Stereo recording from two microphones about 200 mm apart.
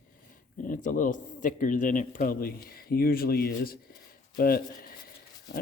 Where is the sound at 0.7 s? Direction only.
40° left (ahead or behind).